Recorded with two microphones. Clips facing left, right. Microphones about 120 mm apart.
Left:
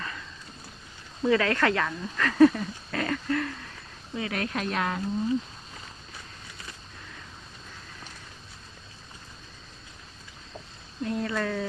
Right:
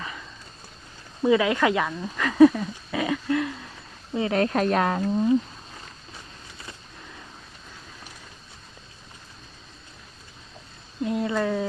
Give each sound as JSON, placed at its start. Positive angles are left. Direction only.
{"t": 0.0, "sound": "a sound", "side_deg": -10}
{"t": 1.2, "sound": "speech", "side_deg": -15}
{"t": 4.1, "sound": "speech", "side_deg": -30}
{"t": 11.0, "sound": "speech", "side_deg": -20}